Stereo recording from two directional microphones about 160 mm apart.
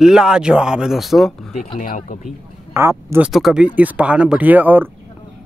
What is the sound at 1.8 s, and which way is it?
Speech, 55° left (ahead or behind).